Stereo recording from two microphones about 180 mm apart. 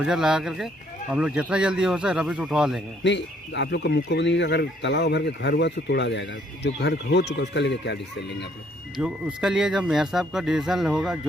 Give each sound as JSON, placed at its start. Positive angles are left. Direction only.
{"t": 0.0, "sound": "speech", "side_deg": -5}
{"t": 3.0, "sound": "speech", "side_deg": 80}
{"t": 9.0, "sound": "speech", "side_deg": -5}